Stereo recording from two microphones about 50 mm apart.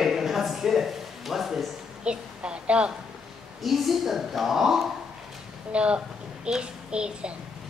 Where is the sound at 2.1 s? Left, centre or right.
Right.